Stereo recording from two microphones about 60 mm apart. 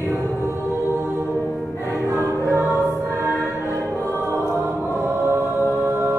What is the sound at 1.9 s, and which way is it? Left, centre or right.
Choir, right.